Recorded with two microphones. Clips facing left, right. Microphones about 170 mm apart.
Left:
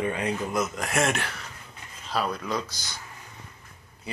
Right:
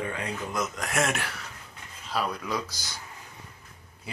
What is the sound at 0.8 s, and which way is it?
Speech, centre (ahead or behind).